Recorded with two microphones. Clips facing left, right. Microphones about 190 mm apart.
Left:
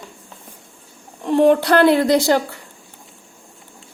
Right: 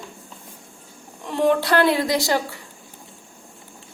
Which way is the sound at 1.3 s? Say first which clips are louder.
Left 6 dB; 50° left (ahead or behind).